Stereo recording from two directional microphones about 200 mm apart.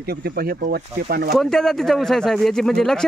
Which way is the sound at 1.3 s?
Centre (ahead or behind).